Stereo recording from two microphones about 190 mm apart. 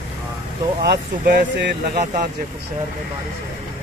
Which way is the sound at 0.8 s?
55° right (ahead or behind).